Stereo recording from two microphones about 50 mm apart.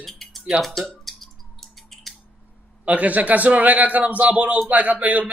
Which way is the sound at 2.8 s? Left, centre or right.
Right.